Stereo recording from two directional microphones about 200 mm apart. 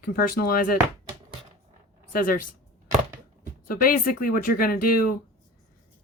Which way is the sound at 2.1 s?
45° left (ahead or behind).